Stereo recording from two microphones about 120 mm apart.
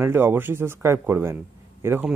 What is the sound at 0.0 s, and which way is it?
A man's voice, 20° right (ahead or behind).